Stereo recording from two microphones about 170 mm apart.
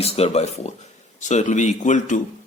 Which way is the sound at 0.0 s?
40° left (ahead or behind).